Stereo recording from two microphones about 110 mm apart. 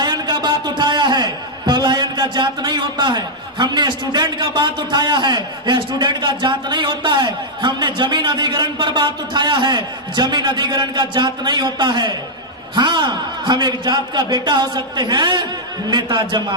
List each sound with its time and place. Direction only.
0.0 s a man's voice: 40° right (ahead or behind)